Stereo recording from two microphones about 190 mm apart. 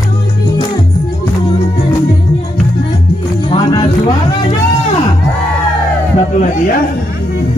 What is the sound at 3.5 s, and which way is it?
Music, 25° left (ahead or behind).